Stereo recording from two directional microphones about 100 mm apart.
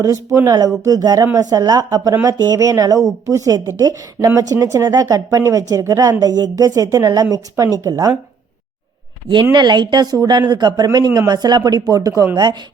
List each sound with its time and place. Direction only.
0.0 s a woman's voice: 35° right (ahead or behind)
9.3 s speech: 50° right (ahead or behind)